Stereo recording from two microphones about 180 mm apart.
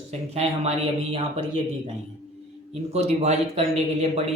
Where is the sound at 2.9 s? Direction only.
35° right (ahead or behind).